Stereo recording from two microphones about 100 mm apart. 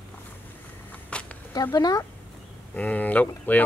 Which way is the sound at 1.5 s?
40° left (ahead or behind).